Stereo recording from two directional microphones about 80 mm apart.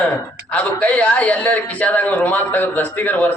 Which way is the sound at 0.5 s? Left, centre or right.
Centre.